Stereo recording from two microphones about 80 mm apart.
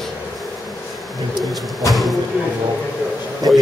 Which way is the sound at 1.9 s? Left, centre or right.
Centre.